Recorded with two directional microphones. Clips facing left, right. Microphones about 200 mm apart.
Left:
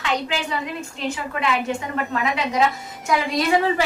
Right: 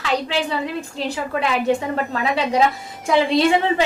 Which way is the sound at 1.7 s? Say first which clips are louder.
Right 5 dB; 35° right (ahead or behind).